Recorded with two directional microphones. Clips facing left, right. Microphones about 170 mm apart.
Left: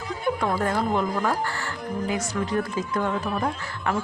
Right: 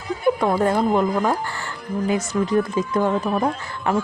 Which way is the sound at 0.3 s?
20° right (ahead or behind).